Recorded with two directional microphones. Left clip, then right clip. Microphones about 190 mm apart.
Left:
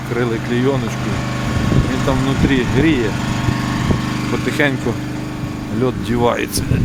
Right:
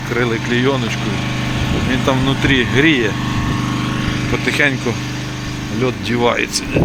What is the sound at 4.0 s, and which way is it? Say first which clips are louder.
Vehicle: right 1 dB; 75° left (ahead or behind).